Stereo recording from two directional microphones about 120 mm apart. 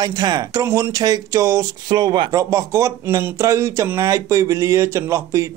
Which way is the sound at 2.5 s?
25° right (ahead or behind).